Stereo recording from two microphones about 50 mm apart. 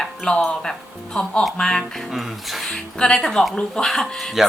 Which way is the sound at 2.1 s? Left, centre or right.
Centre.